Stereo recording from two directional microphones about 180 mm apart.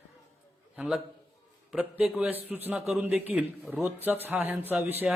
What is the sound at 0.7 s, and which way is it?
A man's voice, 5° right (ahead or behind).